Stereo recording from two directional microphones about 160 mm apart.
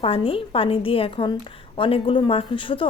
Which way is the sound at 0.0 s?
35° left (ahead or behind).